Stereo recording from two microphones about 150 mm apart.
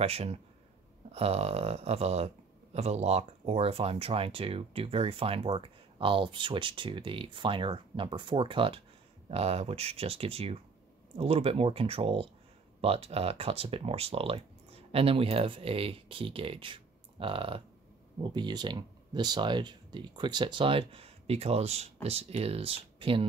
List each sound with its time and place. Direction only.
0.0 s speech: 40° right (ahead or behind)